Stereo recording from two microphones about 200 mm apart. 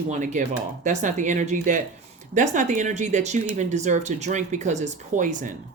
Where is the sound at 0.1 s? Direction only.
40° right (ahead or behind).